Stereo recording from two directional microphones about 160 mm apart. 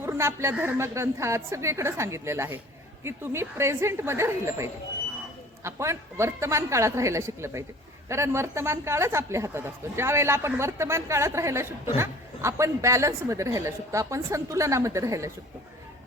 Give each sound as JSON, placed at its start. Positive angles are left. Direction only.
{"t": 0.0, "sound": "a woman's voice", "side_deg": -15}